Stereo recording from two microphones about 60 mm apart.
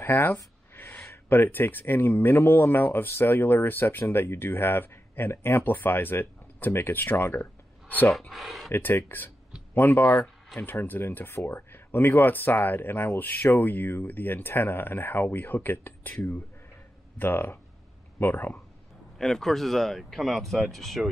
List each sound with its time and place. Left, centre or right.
0.0 s speech: left
0.7 s a sound: left
1.1 s speech: left
8.3 s speech: centre
8.7 s speech: left
10.1 s a sound: centre
10.6 s speech: left
19.1 s speech: centre